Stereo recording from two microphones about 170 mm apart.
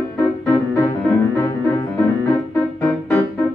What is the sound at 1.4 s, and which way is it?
Music, 15° left (ahead or behind).